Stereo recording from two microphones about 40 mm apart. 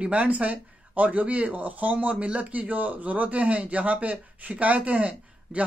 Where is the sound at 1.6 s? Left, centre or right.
Right.